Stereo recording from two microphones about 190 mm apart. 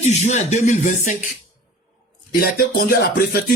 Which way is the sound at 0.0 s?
40° left (ahead or behind).